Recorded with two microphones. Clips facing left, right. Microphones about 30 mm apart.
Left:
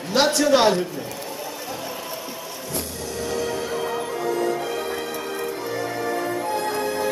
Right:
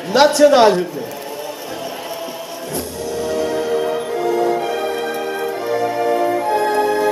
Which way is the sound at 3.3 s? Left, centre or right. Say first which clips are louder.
Right 7 dB; right.